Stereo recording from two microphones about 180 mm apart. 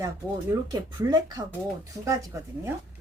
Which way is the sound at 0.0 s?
20° right (ahead or behind).